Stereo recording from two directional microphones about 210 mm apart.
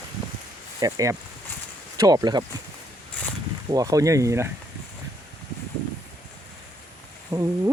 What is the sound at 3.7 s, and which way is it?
Speech, 15° right (ahead or behind).